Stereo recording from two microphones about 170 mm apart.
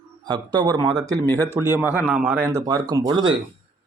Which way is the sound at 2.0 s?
10° right (ahead or behind).